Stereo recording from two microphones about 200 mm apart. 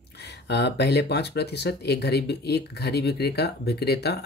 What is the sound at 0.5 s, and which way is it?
Speech, 60° left (ahead or behind).